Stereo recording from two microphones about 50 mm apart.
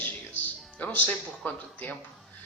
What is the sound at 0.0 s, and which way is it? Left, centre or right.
Music, left.